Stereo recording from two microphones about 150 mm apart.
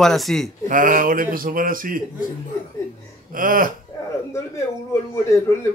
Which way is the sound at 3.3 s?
70° right (ahead or behind).